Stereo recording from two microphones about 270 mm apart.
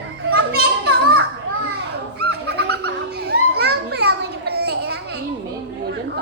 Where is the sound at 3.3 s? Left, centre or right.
Right.